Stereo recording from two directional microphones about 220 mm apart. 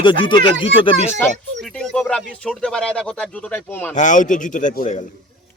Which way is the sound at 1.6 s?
5° left (ahead or behind).